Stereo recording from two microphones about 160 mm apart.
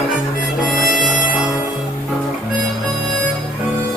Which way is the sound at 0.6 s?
Centre (ahead or behind).